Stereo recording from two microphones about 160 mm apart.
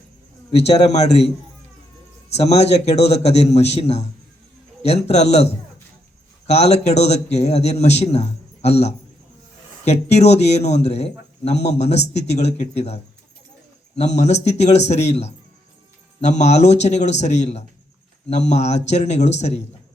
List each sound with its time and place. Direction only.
0.8 s speech: 45° left (ahead or behind)
2.3 s a man's voice: 40° left (ahead or behind)
6.5 s speech: 40° left (ahead or behind)